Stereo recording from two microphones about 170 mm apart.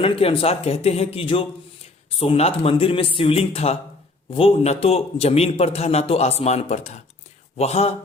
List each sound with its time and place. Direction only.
0.0 s a man's voice: 35° left (ahead or behind)